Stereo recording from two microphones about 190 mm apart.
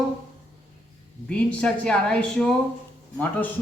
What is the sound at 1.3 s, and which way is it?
A woman's voice, 5° left (ahead or behind).